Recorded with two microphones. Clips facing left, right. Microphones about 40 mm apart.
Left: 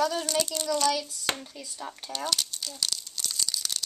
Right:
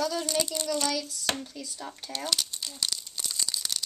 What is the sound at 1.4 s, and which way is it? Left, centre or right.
Speech, centre.